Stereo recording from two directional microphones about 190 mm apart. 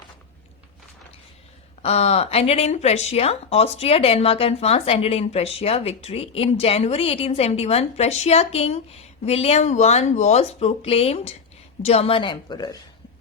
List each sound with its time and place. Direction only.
1.8 s a woman's voice: 35° left (ahead or behind)